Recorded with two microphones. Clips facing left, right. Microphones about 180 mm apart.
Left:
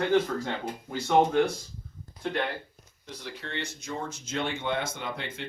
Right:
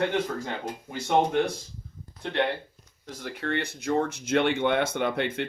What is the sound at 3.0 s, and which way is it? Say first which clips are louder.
Speech: right 7 dB; 50° right (ahead or behind).